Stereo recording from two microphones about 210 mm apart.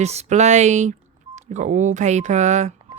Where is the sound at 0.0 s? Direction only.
30° right (ahead or behind).